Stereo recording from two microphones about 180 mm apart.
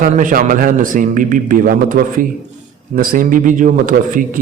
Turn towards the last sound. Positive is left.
turn(degrees=-45)  # may be behind; listen again after turning